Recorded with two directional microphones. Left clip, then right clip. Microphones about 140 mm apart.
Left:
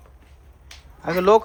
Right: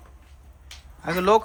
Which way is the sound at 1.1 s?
25° right (ahead or behind).